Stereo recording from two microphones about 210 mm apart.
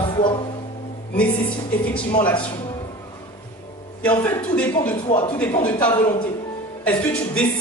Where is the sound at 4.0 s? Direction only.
5° left (ahead or behind).